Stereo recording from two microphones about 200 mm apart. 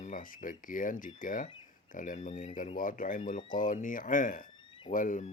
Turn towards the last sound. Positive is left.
turn(degrees=40)  # may be behind; listen again after turning